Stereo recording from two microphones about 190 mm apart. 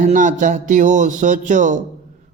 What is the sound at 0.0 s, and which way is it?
A man's voice, 40° right (ahead or behind).